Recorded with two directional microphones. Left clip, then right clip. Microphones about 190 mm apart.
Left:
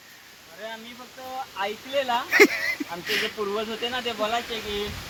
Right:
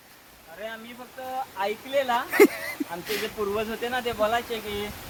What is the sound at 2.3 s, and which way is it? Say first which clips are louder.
Speech: left 3 dB; 15° right (ahead or behind).